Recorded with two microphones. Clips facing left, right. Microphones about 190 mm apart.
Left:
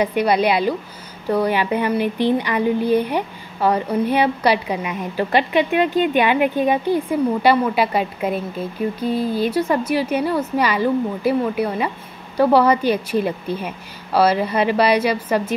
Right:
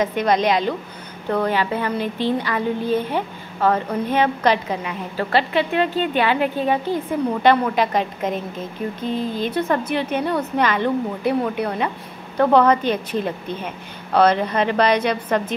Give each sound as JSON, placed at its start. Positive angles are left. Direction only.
{"t": 0.0, "sound": "a woman's voice", "side_deg": 10}